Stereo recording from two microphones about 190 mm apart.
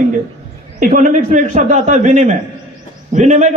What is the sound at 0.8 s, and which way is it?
A man's voice, 50° right (ahead or behind).